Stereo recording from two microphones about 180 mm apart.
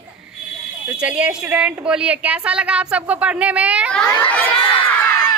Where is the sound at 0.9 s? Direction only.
5° right (ahead or behind).